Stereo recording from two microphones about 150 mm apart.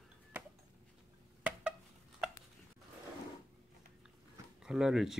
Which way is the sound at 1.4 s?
10° right (ahead or behind).